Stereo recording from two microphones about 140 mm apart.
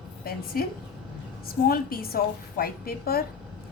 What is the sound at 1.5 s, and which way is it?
A woman's voice, 90° left.